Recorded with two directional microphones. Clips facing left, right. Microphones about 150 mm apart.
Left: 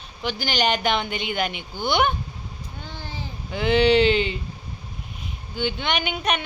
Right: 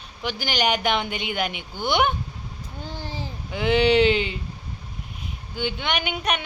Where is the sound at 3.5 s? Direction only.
10° right (ahead or behind).